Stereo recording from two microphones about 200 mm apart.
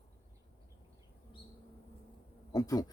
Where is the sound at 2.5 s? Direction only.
20° left (ahead or behind).